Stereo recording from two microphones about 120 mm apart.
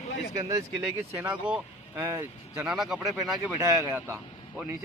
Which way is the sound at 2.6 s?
5° right (ahead or behind).